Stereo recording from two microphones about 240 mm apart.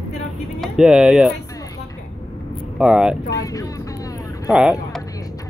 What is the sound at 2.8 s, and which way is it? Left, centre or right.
Speech, centre.